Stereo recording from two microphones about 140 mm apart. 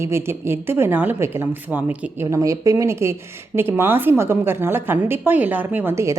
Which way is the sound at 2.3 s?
25° right (ahead or behind).